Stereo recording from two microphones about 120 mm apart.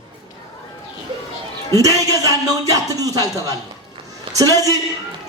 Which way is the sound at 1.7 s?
30° right (ahead or behind).